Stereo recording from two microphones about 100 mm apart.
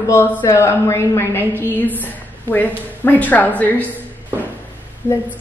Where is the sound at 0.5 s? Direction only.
30° left (ahead or behind).